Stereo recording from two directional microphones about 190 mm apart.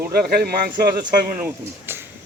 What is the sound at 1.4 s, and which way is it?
Speech, 10° right (ahead or behind).